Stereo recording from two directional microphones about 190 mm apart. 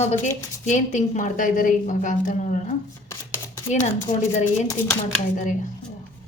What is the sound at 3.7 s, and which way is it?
A woman's voice, 35° left (ahead or behind).